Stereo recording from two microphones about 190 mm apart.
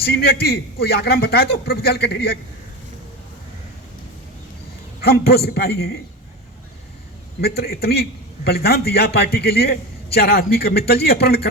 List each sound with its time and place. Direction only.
0.0 s a man's voice: 55° left (ahead or behind)
4.9 s a man's voice: 55° left (ahead or behind)
7.4 s a man's voice: 55° left (ahead or behind)